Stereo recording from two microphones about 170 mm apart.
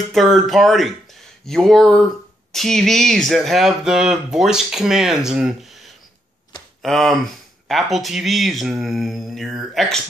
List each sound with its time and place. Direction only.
0.1 s speech: centre (ahead or behind)